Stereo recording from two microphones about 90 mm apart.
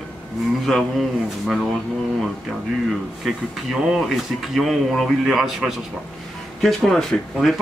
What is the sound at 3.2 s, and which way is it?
Speech, centre (ahead or behind).